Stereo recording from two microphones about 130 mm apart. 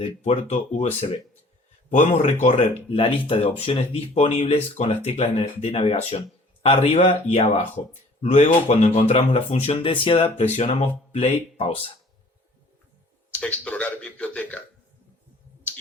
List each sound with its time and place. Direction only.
0.3 s speech: 60° left (ahead or behind)
2.9 s speech: 45° left (ahead or behind)
7.1 s speech: 65° left (ahead or behind); by 11.9 s 50° left (ahead or behind)
13.3 s speech: 10° left (ahead or behind)